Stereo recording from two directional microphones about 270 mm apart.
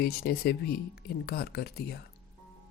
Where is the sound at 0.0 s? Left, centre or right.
Left.